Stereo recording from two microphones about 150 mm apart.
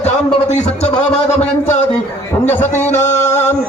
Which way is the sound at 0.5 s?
45° left (ahead or behind).